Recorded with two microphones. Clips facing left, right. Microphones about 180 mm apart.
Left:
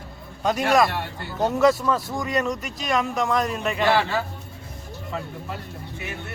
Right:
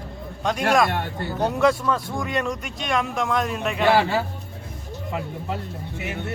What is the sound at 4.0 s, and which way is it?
Speech, 25° right (ahead or behind).